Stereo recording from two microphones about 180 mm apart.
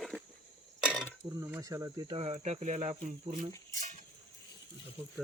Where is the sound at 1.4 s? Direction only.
15° right (ahead or behind).